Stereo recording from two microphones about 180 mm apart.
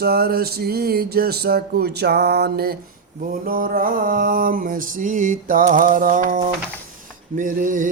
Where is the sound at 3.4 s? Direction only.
55° right (ahead or behind).